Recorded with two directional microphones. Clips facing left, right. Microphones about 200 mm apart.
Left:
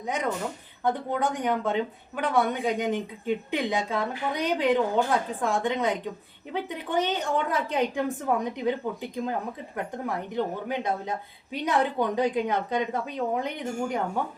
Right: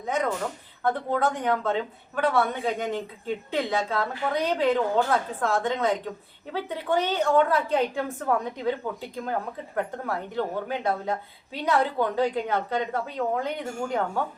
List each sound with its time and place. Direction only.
0.9 s speech: 15° left (ahead or behind)
10.3 s speech: 15° left (ahead or behind)